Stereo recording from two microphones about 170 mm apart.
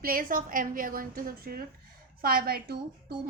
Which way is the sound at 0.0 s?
60° right (ahead or behind).